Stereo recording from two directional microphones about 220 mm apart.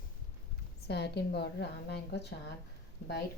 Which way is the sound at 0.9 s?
50° left (ahead or behind).